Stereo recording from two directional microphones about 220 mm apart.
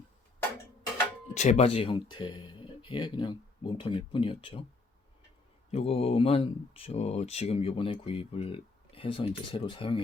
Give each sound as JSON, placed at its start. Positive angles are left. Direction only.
{"t": 1.3, "sound": "speech", "side_deg": 30}
{"t": 5.7, "sound": "speech", "side_deg": 25}